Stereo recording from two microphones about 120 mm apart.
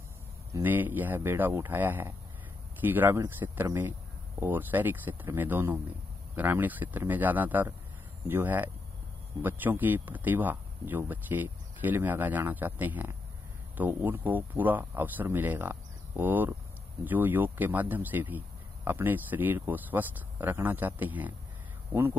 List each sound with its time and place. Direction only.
0.5 s speech: 15° right (ahead or behind)